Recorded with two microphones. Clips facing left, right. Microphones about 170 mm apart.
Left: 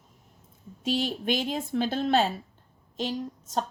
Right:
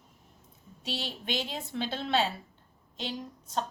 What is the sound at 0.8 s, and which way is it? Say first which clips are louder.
A woman's voice: left 9 dB; 50° left (ahead or behind).